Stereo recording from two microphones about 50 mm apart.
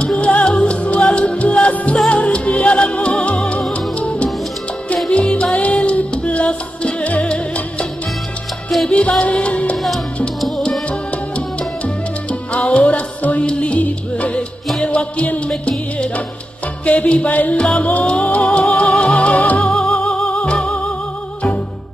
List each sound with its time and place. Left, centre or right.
0.0 s music: left
8.8 s music: left
10.9 s music: left
16.8 s music: left
17.6 s music: centre
19.7 s music: left